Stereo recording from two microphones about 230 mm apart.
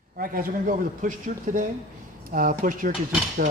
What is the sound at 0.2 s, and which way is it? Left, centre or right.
Speech, right.